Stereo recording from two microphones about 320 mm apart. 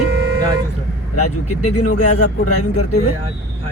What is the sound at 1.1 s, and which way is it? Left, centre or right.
Speech, left.